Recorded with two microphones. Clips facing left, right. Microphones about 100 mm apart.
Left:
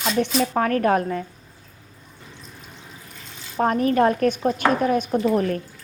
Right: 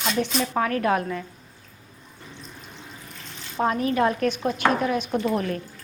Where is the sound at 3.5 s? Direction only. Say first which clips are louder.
Left 3 dB; 45° left (ahead or behind).